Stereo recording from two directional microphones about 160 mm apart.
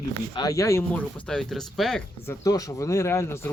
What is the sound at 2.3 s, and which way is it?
Speech, 20° left (ahead or behind).